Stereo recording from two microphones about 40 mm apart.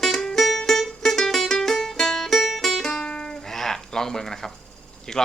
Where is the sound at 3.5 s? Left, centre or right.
Centre.